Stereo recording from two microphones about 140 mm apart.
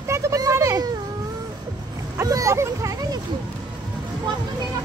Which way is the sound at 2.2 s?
25° right (ahead or behind).